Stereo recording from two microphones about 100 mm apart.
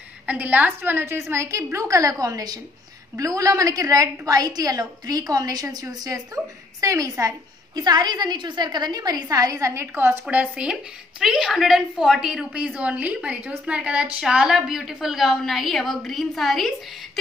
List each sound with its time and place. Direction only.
0.3 s a woman's voice: 15° right (ahead or behind)
10.2 s a woman's voice: 10° right (ahead or behind)